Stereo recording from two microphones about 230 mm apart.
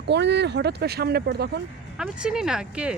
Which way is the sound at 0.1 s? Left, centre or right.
Right.